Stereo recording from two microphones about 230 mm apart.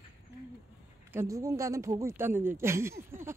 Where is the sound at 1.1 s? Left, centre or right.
Centre.